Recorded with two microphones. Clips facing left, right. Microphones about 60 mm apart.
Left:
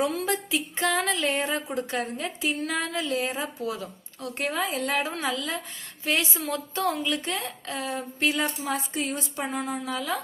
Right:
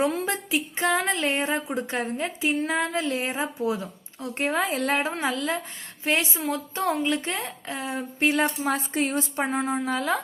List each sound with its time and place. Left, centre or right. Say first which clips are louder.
0.0 s a woman's voice: right 1 dB; right
8.4 s a woman's voice: right 3 dB; right